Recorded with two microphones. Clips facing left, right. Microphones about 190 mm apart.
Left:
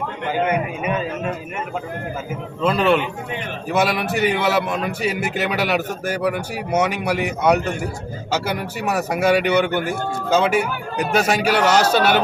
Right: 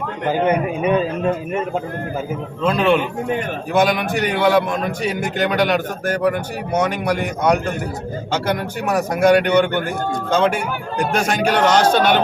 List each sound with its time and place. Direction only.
0.8 s a man's voice: 30° right (ahead or behind)
2.6 s a man's voice: centre (ahead or behind)